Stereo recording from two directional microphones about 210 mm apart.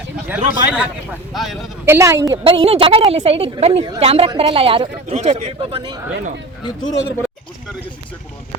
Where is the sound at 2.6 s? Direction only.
25° right (ahead or behind).